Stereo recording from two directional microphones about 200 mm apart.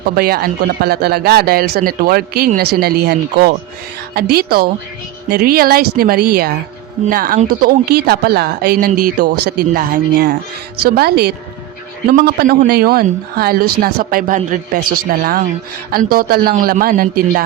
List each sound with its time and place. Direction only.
0.2 s speech: 50° right (ahead or behind)